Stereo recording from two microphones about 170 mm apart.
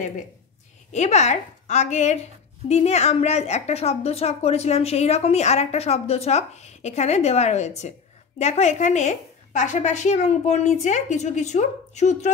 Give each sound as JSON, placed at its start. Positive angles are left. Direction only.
{"t": 0.9, "sound": "a woman's voice", "side_deg": 45}